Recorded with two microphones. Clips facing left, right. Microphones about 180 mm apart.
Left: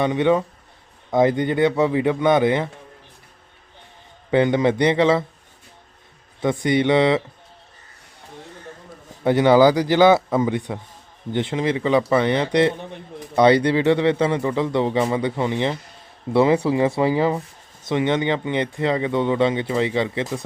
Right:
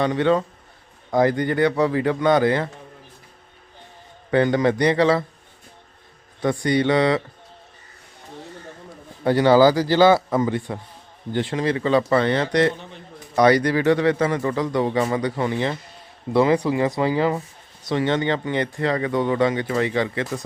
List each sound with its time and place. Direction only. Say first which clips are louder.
0.0 s speech: left 1 dB; 20° left (ahead or behind)
4.3 s speech: left 1 dB; 20° left (ahead or behind)
6.4 s speech: left 1 dB; 20° left (ahead or behind)
9.2 s a man's voice: left 1 dB; 20° left (ahead or behind)